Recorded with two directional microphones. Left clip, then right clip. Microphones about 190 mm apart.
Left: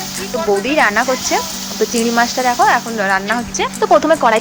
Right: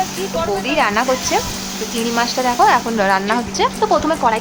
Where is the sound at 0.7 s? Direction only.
10° left (ahead or behind).